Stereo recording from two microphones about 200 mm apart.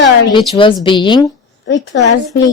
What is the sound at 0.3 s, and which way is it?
Speech, 25° left (ahead or behind).